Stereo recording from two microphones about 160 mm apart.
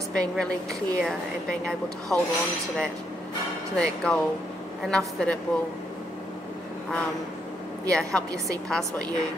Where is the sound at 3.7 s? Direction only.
5° left (ahead or behind).